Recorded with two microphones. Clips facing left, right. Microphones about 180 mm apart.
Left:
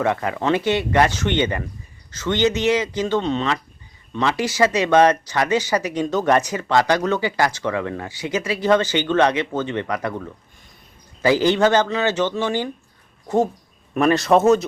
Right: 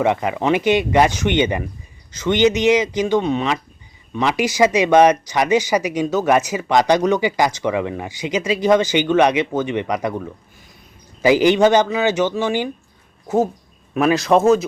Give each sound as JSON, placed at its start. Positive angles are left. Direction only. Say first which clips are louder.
{"t": 0.0, "sound": "a man's voice", "louder": "right 3 dB", "side_deg": -15}